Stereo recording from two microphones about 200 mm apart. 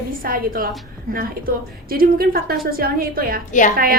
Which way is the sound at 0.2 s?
45° right (ahead or behind).